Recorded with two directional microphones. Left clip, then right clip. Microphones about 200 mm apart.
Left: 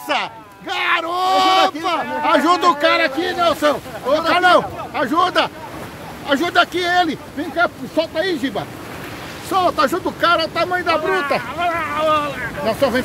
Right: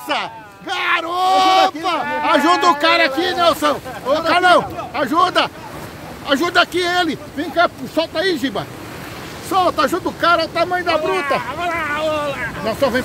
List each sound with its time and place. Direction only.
0.1 s speech: centre (ahead or behind); by 3.7 s 20° right (ahead or behind)
4.3 s speech: 10° right (ahead or behind)
9.5 s speech: 5° right (ahead or behind)
11.6 s boat: 60° right (ahead or behind)
12.6 s speech: centre (ahead or behind)